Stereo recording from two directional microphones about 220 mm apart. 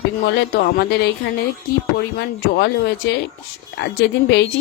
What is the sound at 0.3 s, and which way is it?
A woman's voice, 45° left (ahead or behind).